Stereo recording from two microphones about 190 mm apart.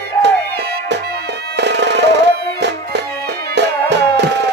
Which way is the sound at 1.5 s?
65° right (ahead or behind).